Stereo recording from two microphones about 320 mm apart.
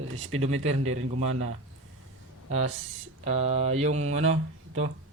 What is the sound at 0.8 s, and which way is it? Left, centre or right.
Speech, right.